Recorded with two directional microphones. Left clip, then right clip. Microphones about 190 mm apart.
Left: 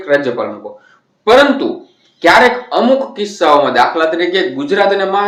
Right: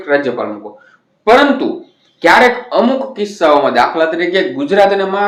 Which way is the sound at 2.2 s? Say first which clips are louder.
Even; 15° right (ahead or behind).